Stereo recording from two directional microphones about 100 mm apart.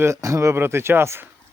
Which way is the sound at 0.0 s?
30° right (ahead or behind).